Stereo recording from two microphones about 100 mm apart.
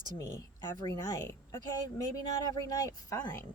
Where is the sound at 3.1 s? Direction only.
30° left (ahead or behind).